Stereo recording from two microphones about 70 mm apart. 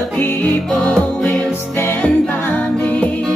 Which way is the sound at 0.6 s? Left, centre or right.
Centre.